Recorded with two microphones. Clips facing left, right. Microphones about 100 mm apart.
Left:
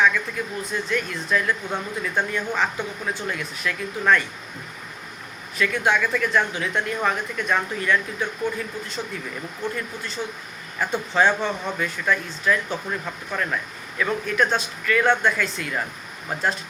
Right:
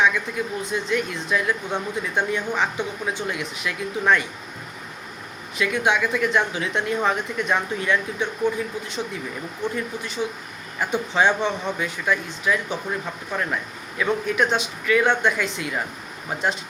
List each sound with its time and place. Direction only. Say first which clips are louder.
0.0 s speech: even; 15° right (ahead or behind)
5.5 s speech: even; 15° right (ahead or behind)
9.7 s speech: right 3 dB; 15° right (ahead or behind)